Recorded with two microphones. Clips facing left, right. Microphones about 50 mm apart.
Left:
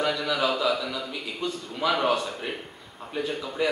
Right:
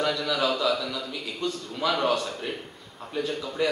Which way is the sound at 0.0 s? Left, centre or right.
Centre.